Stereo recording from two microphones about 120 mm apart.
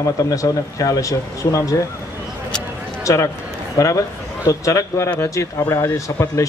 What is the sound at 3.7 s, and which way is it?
A man's voice, 25° left (ahead or behind).